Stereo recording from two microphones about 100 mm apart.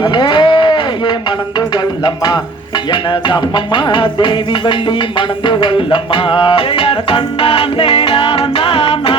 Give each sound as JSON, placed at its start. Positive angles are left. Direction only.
{"t": 0.0, "sound": "livestock", "side_deg": 50}
{"t": 1.5, "sound": "music", "side_deg": 45}